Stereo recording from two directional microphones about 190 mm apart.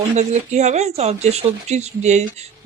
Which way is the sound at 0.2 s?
35° right (ahead or behind).